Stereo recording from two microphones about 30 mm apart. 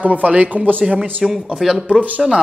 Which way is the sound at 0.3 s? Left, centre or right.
Right.